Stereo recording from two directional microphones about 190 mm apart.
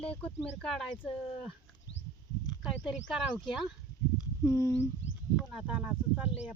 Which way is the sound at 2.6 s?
Centre (ahead or behind).